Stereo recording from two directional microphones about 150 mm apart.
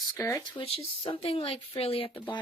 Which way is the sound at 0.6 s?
40° left (ahead or behind).